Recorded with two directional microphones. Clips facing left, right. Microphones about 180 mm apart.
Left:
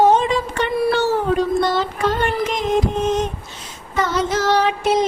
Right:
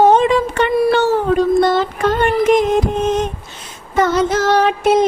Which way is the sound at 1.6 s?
55° right (ahead or behind).